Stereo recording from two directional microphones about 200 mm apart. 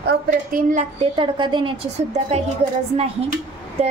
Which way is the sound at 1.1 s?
25° right (ahead or behind).